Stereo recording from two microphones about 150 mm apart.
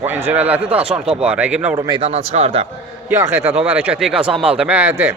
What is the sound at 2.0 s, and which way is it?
Speech, 45° right (ahead or behind).